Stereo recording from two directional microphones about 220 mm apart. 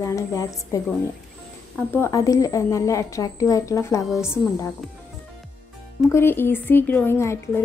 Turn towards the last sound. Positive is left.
turn(degrees=10)  # may be behind; listen again after turning